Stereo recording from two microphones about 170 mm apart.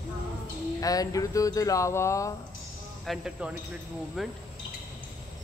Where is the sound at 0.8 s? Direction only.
20° left (ahead or behind).